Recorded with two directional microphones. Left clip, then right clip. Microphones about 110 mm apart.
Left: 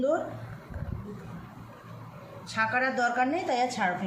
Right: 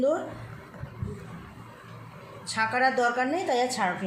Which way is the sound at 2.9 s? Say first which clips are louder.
Right 1 dB; 80° right.